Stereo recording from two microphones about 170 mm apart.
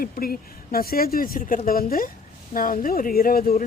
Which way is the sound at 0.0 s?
60° left (ahead or behind).